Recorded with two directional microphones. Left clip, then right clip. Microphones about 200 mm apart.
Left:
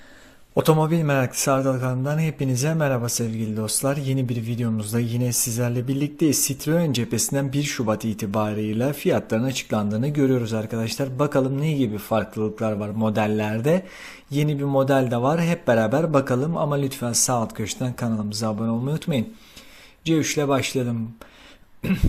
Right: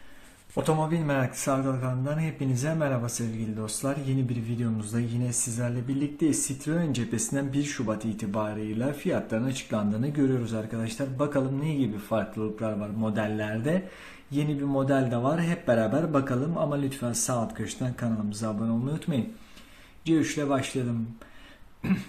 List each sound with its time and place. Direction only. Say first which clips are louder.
0.5 s speech: left 7 dB; 45° left (ahead or behind)